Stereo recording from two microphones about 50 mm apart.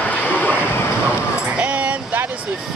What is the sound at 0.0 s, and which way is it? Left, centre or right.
Vehicle, left.